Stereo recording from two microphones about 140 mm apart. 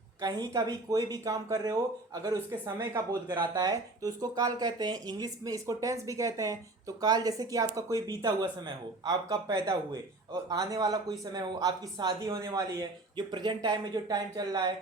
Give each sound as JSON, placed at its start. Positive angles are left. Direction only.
{"t": 0.2, "sound": "speech", "side_deg": -25}
{"t": 13.1, "sound": "speech", "side_deg": -30}